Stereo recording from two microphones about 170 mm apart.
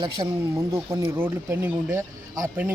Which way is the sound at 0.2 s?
25° right (ahead or behind).